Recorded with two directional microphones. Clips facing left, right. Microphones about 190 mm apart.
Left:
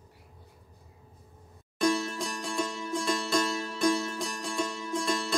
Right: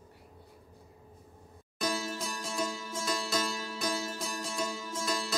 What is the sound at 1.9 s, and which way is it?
Music, centre (ahead or behind).